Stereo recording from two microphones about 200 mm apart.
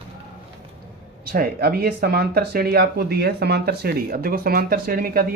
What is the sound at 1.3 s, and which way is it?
Speech, 50° right (ahead or behind).